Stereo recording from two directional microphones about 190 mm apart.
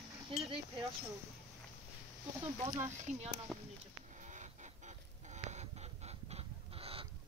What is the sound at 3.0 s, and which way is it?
Speech, 35° right (ahead or behind).